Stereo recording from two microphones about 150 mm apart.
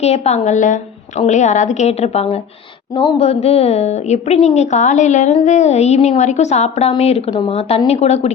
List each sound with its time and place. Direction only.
0.0 s a woman's voice: 45° left (ahead or behind)